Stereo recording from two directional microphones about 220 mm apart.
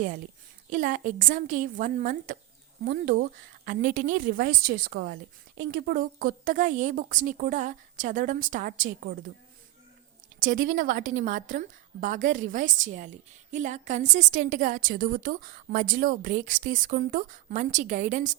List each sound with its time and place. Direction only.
0.7 s a woman's voice: 35° right (ahead or behind)
10.4 s a woman's voice: 40° right (ahead or behind)